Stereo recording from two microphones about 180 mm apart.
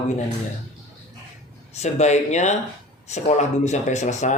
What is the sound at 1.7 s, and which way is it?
Speech, 40° left (ahead or behind).